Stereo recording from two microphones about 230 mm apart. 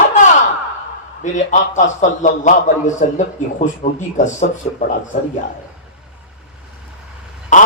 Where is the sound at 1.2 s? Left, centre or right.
Left.